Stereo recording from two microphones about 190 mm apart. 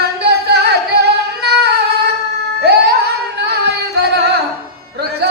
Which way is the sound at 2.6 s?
60° right (ahead or behind).